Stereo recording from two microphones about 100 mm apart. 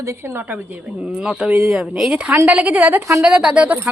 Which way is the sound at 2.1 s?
15° right (ahead or behind).